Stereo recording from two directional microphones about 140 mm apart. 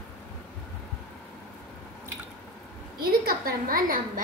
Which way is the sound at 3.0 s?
90° right.